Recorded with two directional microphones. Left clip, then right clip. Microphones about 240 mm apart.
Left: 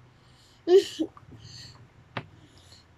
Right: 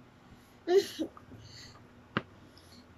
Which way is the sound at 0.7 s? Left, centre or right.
Centre.